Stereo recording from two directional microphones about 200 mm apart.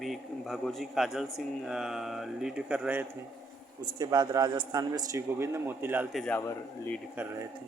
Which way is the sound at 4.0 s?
20° right (ahead or behind).